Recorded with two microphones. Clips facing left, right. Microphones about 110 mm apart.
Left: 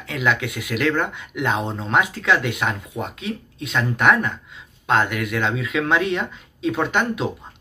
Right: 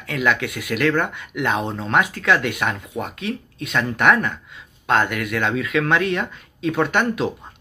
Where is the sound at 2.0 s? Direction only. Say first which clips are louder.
Right 1 dB; 60° right (ahead or behind).